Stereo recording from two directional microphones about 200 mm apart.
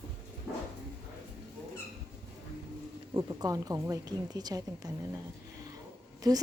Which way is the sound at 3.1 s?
20° right (ahead or behind).